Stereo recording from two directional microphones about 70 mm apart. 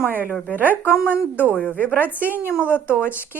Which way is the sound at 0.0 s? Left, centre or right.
Right.